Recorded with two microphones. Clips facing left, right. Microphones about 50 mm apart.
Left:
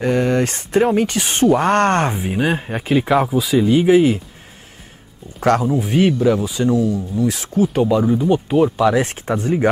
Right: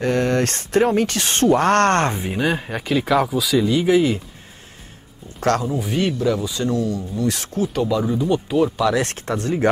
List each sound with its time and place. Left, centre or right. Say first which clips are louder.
0.0 s speech: left 2 dB; centre
2.3 s speech: left 2 dB; centre
3.9 s speech: left 3 dB; centre
5.4 s speech: left 4 dB; centre
7.7 s speech: left 3 dB; left